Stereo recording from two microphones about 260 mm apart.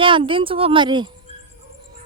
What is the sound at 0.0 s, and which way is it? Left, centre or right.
A woman's voice, centre.